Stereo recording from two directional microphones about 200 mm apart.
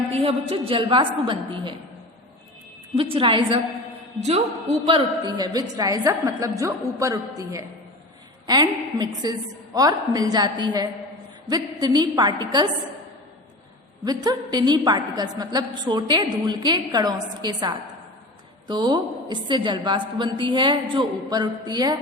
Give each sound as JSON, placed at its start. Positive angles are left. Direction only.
{"t": 0.1, "sound": "a woman's voice", "side_deg": -30}
{"t": 2.9, "sound": "a woman's voice", "side_deg": -25}
{"t": 5.4, "sound": "a woman's voice", "side_deg": -20}
{"t": 14.0, "sound": "a woman's voice", "side_deg": -20}